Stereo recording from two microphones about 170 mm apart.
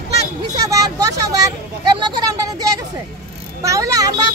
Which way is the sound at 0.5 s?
20° right (ahead or behind).